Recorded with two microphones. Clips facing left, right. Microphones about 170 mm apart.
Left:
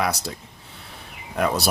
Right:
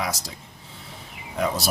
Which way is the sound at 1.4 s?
65° left (ahead or behind).